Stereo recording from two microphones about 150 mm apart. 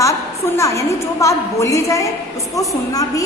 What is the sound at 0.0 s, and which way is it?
A woman's voice, 20° left (ahead or behind).